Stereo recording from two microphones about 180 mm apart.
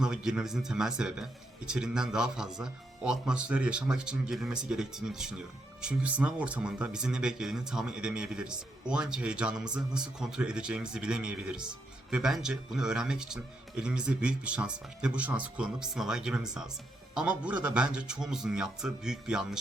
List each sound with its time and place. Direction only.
0.0 s speech: 5° right (ahead or behind)